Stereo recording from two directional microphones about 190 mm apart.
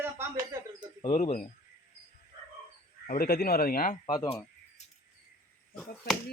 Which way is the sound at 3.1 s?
50° left (ahead or behind).